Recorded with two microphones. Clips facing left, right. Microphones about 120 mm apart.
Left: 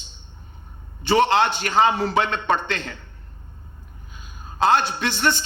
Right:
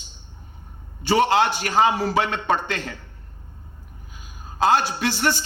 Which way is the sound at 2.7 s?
25° left (ahead or behind).